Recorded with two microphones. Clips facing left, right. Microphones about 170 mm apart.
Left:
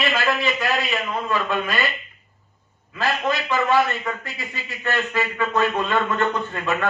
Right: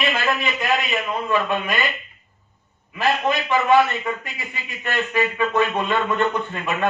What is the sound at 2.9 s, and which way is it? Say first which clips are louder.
A man's voice: right 2 dB; 20° right (ahead or behind).